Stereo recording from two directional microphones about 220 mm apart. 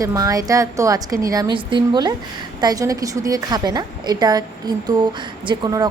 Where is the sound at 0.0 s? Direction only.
15° right (ahead or behind).